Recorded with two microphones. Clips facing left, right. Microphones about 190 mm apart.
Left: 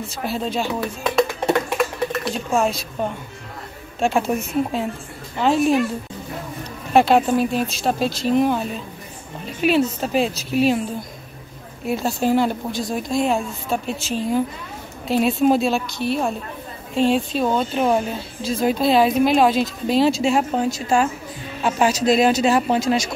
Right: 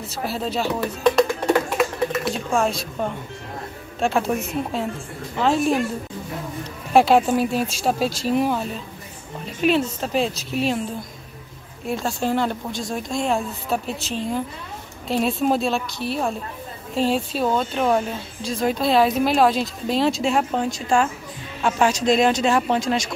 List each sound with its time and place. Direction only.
0.1 s a woman's voice: 5° right (ahead or behind)
6.9 s a woman's voice: 5° right (ahead or behind)
11.9 s a woman's voice: 5° left (ahead or behind)